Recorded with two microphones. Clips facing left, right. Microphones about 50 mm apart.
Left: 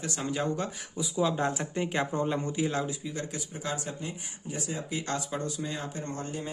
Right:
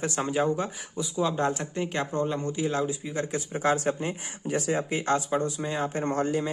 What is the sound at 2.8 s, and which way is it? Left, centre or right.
Speech, right.